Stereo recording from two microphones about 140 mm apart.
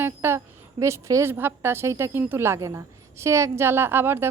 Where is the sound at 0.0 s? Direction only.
15° right (ahead or behind).